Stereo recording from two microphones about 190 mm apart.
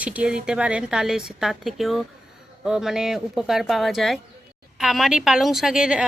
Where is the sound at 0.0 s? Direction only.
5° right (ahead or behind).